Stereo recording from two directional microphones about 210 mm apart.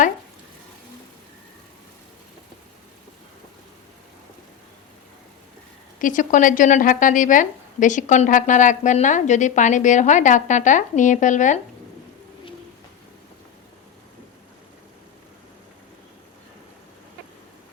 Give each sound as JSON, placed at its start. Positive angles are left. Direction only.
{"t": 6.0, "sound": "a woman's voice", "side_deg": 40}